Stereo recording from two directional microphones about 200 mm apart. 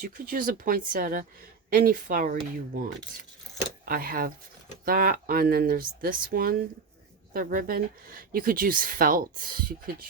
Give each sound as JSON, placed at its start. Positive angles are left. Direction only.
{"t": 0.0, "sound": "a woman's voice", "side_deg": -45}
{"t": 3.8, "sound": "a woman's voice", "side_deg": -45}